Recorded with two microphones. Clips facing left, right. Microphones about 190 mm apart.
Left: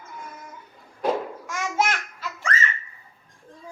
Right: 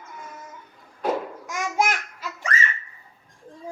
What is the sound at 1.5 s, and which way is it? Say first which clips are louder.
Babbling: right 1 dB; 10° right (ahead or behind).